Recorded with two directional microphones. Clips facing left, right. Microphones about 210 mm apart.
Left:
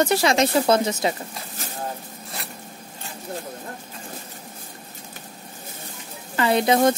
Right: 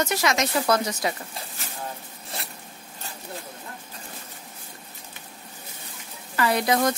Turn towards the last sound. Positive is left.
turn(degrees=25)  # may be behind; listen again after turning